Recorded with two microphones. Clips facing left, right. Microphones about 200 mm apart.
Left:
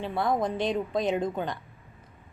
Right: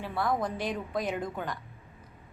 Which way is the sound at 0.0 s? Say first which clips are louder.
Left 3 dB; 20° left (ahead or behind).